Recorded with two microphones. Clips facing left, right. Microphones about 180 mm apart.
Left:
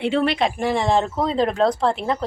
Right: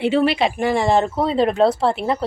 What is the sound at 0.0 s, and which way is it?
Speech, 5° right (ahead or behind).